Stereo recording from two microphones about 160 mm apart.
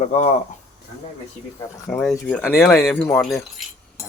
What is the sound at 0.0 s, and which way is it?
Speech, 50° left (ahead or behind).